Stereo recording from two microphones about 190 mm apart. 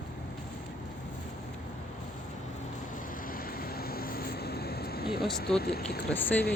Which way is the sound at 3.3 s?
50° left (ahead or behind).